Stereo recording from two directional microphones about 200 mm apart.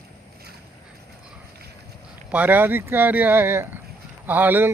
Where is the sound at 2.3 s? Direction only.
10° right (ahead or behind).